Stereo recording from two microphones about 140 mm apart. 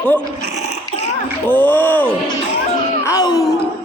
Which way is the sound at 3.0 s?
25° left (ahead or behind).